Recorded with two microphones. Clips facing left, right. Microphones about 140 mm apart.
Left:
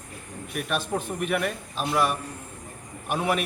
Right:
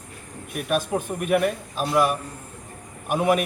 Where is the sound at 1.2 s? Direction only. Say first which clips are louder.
Right 7 dB; 45° right (ahead or behind).